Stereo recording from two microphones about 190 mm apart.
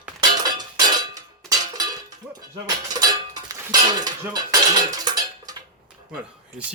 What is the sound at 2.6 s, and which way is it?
Cutlery, 20° right (ahead or behind).